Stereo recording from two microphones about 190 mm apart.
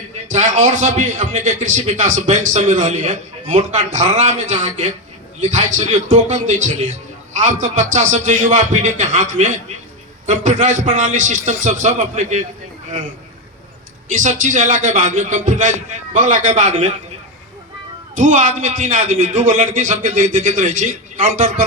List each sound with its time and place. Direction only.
0.3 s a man's voice: 40° right (ahead or behind)
14.1 s a man's voice: 40° right (ahead or behind)
18.2 s a man's voice: 40° right (ahead or behind)